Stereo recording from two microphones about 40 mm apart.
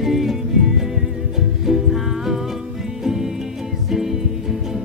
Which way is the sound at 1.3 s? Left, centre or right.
Centre.